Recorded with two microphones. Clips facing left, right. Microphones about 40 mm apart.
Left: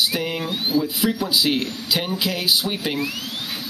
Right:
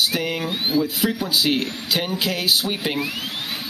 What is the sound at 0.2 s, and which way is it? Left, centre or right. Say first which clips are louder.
Speech: right 1 dB; centre.